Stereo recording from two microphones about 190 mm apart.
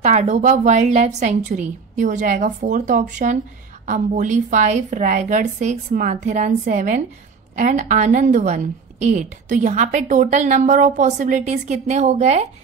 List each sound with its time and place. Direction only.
0.0 s a woman's voice: 40° right (ahead or behind)